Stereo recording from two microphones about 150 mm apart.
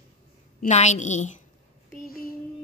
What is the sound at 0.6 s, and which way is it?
Speech, 50° left (ahead or behind).